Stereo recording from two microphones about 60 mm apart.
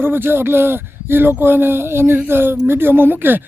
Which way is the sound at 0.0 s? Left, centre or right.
Right.